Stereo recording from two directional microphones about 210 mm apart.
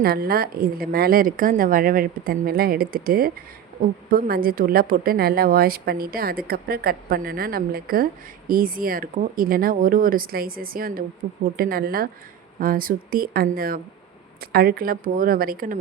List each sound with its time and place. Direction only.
0.0 s speech: 45° right (ahead or behind)